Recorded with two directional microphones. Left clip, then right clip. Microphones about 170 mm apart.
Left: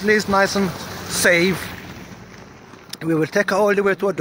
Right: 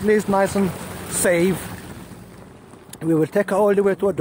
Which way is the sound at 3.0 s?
20° right (ahead or behind).